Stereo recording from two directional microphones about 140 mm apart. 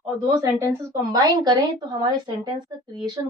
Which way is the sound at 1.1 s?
25° right (ahead or behind).